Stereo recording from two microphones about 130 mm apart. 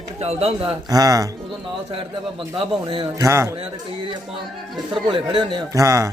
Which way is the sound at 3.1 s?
20° right (ahead or behind).